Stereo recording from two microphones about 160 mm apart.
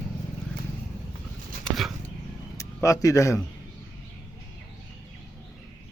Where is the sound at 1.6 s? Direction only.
Centre (ahead or behind).